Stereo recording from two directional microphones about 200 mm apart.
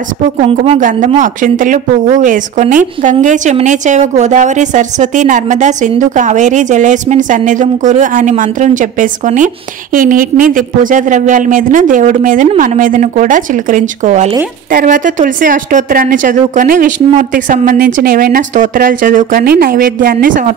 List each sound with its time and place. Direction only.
0.4 s a woman's voice: 35° right (ahead or behind)